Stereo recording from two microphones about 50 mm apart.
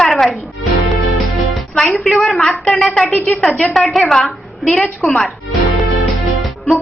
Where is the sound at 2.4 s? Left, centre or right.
Centre.